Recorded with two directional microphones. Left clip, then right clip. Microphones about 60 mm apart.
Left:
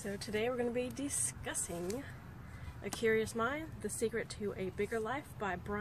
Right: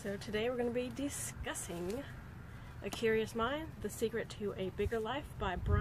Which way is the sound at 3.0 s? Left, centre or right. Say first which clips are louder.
Left 1 dB; centre.